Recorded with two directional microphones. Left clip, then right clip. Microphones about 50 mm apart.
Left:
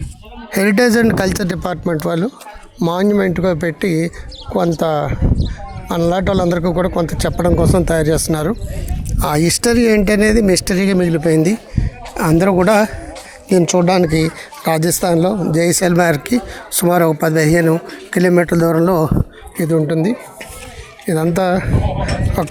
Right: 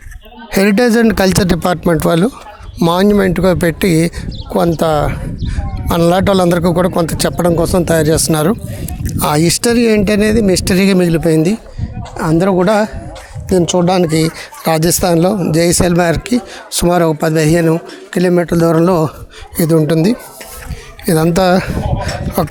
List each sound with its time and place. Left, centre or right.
0.5 s speech: right
1.2 s speech: right
9.0 s speech: right
10.8 s speech: right
11.3 s speech: centre
12.1 s a woman's voice: centre
18.6 s speech: right
19.5 s speech: right
21.1 s speech: right